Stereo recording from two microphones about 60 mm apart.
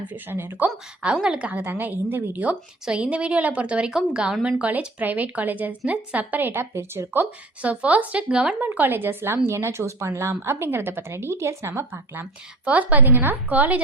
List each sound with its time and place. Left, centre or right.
0.1 s a woman's voice: right
1.2 s a woman's voice: centre
1.6 s a woman's voice: right
2.8 s a woman's voice: centre; by 7.3 s right
7.6 s a woman's voice: right
8.6 s speech: right
12.2 s speech: right